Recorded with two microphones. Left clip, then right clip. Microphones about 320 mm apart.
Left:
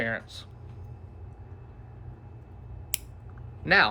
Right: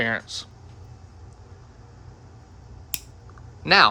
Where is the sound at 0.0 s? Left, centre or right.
Centre.